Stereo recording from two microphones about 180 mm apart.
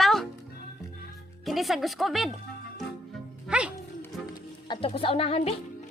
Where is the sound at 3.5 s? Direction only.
5° right (ahead or behind).